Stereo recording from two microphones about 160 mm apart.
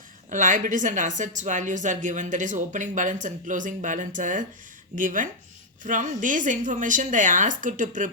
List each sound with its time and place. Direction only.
0.3 s a woman's voice: 55° right (ahead or behind)